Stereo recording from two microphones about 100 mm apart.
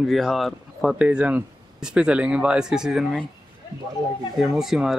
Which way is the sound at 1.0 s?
10° right (ahead or behind).